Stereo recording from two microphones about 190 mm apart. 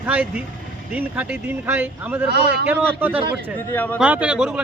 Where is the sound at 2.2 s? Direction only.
60° right (ahead or behind).